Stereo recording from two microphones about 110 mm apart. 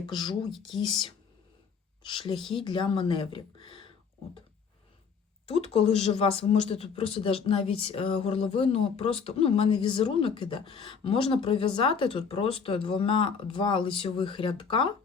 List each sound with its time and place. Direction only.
0.0 s a woman's voice: 40° left (ahead or behind)
2.0 s a woman's voice: 50° left (ahead or behind)
5.5 s speech: 70° left (ahead or behind); by 14.9 s 50° left (ahead or behind)